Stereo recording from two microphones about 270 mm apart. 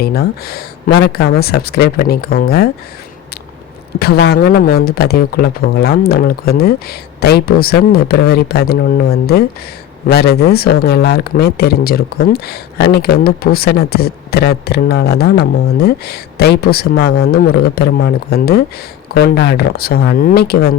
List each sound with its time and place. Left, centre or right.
0.0 s speech: left
3.9 s speech: left